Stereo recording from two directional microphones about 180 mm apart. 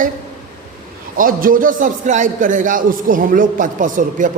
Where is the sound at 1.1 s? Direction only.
50° right (ahead or behind).